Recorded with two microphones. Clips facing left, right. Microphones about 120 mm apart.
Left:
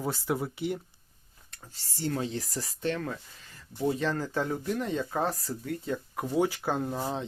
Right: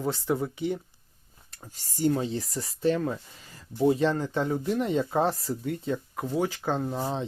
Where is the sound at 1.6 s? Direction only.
15° right (ahead or behind).